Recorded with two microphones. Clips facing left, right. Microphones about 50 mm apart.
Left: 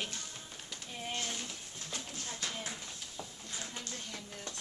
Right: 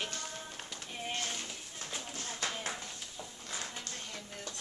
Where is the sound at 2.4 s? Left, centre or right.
Right.